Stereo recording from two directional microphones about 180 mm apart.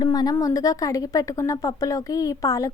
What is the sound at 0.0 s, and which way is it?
A woman's voice, 20° left (ahead or behind).